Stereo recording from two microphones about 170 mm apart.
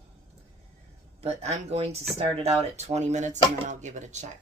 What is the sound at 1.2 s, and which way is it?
Speech, 40° right (ahead or behind).